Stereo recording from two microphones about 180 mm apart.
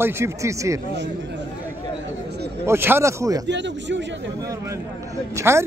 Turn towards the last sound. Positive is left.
turn(degrees=-15)  # may be behind; listen again after turning